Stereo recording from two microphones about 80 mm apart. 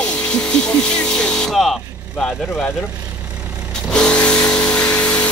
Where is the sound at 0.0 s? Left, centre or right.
Centre.